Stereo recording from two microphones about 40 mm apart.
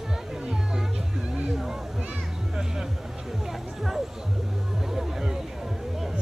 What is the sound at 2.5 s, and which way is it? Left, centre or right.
Music, centre.